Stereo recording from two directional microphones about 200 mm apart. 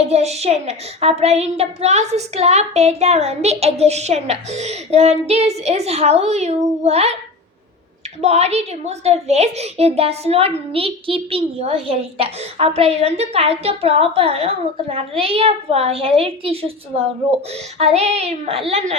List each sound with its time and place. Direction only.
0.0 s a woman's voice: 30° right (ahead or behind)
8.2 s a child's voice: 30° right (ahead or behind)